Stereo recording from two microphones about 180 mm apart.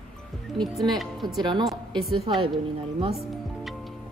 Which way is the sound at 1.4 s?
25° right (ahead or behind).